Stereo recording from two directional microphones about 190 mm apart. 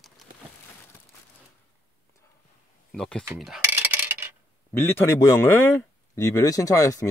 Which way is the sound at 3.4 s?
5° right (ahead or behind).